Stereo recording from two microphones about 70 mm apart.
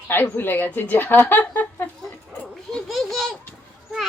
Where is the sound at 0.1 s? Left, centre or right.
Left.